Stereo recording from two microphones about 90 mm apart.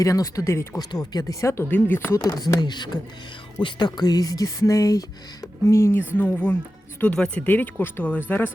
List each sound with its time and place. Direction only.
0.0 s speech: 40° left (ahead or behind)
0.8 s speech: 50° left (ahead or behind); by 1.7 s 30° left (ahead or behind)
1.7 s speech: 20° left (ahead or behind)
2.0 s speech: 40° left (ahead or behind); by 8.2 s 20° left (ahead or behind)